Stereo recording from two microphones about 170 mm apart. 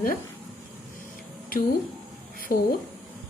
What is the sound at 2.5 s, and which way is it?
Speech, 55° left (ahead or behind).